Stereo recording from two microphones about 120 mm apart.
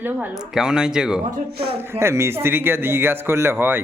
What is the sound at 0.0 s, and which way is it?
Speech, 15° right (ahead or behind).